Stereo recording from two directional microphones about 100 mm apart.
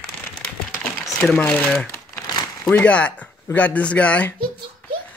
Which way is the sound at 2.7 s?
10° left (ahead or behind).